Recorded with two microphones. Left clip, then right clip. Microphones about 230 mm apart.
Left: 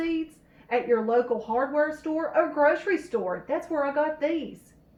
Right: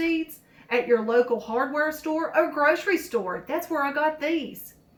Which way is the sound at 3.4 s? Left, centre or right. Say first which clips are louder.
Right 1 dB; right.